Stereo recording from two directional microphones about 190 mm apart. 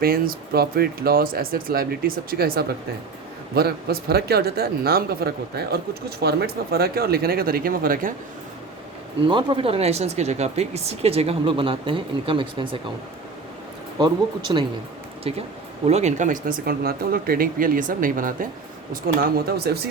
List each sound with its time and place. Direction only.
0.0 s speech: 50° right (ahead or behind)
9.2 s speech: 25° right (ahead or behind)
14.5 s speech: 20° right (ahead or behind)
15.2 s speech: 30° right (ahead or behind); by 19.9 s 55° right (ahead or behind)